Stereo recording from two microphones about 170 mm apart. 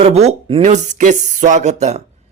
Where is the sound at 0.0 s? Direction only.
40° right (ahead or behind).